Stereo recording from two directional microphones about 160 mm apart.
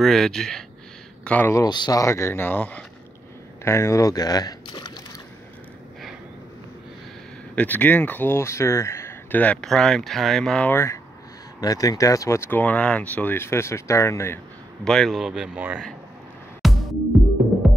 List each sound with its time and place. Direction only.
0.0 s speech: centre (ahead or behind); by 5.0 s 25° left (ahead or behind)
7.5 s speech: 10° left (ahead or behind)
14.9 s speech: centre (ahead or behind)
16.6 s music: centre (ahead or behind)